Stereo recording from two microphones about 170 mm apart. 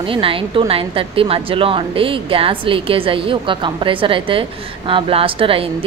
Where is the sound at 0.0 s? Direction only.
30° right (ahead or behind).